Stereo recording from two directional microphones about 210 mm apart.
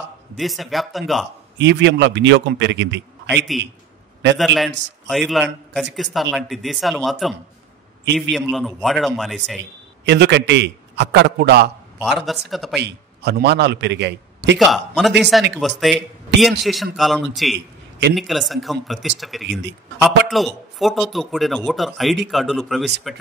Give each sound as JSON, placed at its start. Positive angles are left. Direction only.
{"t": 0.4, "sound": "a man's voice", "side_deg": 0}
{"t": 1.6, "sound": "a man's voice", "side_deg": -55}
{"t": 3.5, "sound": "a man's voice", "side_deg": 0}
{"t": 10.0, "sound": "a man's voice", "side_deg": -55}
{"t": 12.0, "sound": "a man's voice", "side_deg": 0}
{"t": 12.8, "sound": "a man's voice", "side_deg": -50}
{"t": 14.6, "sound": "a man's voice", "side_deg": 0}